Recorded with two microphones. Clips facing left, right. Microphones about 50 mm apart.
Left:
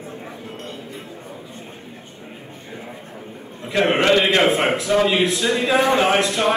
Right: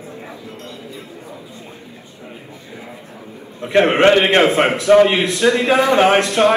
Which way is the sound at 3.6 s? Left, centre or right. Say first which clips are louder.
Right 6 dB; right.